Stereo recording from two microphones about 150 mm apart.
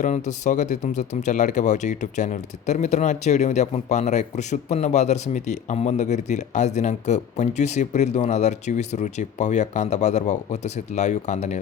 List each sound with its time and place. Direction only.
0.0 s speech: 55° left (ahead or behind)